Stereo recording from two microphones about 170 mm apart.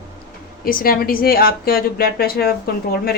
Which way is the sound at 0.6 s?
60° left (ahead or behind).